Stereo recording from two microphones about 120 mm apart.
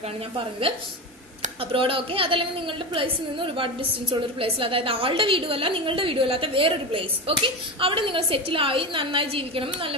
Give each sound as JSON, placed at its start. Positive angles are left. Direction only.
{"t": 0.6, "sound": "a woman's voice", "side_deg": -50}